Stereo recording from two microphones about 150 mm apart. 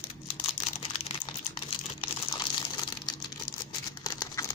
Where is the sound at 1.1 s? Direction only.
40° left (ahead or behind).